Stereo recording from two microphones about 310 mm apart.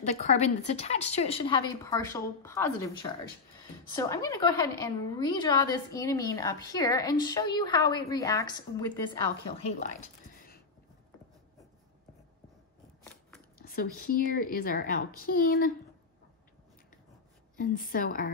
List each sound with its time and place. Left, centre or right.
0.0 s a woman's voice: left
3.9 s a woman's voice: centre
9.6 s speech: left
13.6 s a woman's voice: left
17.6 s a woman's voice: left